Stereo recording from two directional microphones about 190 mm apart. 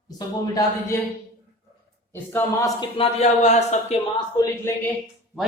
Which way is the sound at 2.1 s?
10° left (ahead or behind).